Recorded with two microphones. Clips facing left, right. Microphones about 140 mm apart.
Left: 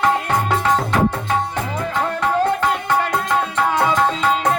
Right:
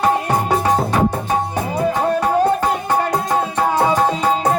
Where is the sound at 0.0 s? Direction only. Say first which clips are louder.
Right 1 dB; 15° right (ahead or behind).